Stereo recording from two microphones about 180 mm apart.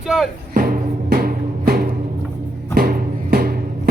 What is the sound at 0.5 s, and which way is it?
Music, 50° right (ahead or behind).